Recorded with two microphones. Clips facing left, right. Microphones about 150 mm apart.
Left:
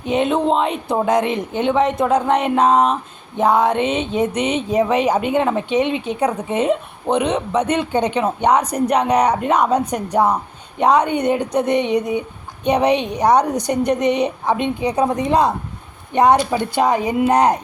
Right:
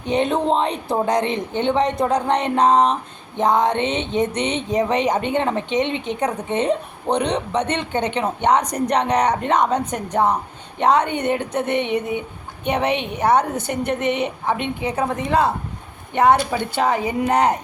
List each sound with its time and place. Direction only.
0.1 s a woman's voice: centre (ahead or behind)
3.8 s a sound: 25° right (ahead or behind)
4.2 s a woman's voice: 10° left (ahead or behind)